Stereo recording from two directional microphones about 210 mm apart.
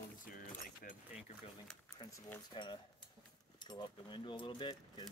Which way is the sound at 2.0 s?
15° left (ahead or behind).